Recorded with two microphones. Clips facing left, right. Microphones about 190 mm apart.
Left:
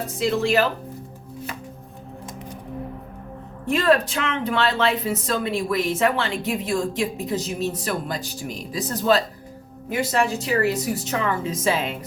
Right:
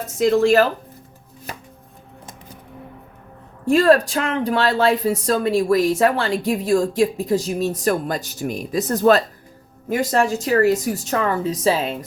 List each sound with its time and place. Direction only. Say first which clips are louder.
0.2 s speech: right 6 dB; 45° right (ahead or behind)
3.7 s a woman's voice: right 5 dB; 40° right (ahead or behind)